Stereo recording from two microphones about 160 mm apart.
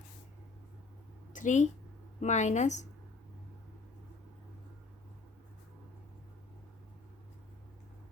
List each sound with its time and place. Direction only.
1.3 s speech: 50° left (ahead or behind)